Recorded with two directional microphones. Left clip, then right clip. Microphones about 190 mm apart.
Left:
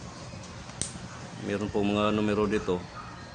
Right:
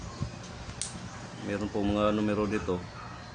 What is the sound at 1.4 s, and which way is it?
Speech, 45° left (ahead or behind).